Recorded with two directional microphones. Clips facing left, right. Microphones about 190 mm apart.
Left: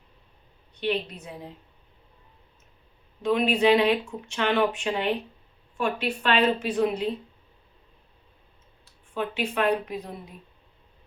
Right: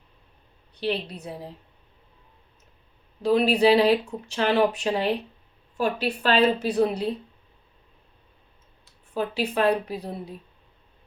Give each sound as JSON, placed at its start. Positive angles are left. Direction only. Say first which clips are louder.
{"t": 0.7, "sound": "speech", "louder": "even", "side_deg": -35}
{"t": 3.2, "sound": "speech", "louder": "right 2 dB", "side_deg": -35}
{"t": 9.1, "sound": "speech", "louder": "right 2 dB", "side_deg": -35}